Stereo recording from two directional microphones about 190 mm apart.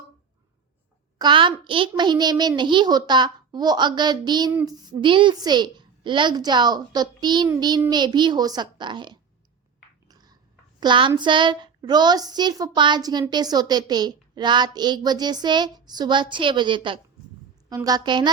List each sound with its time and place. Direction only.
1.2 s a woman's voice: 25° right (ahead or behind)
10.1 s a sound: 20° right (ahead or behind)
10.8 s a woman's voice: 25° right (ahead or behind)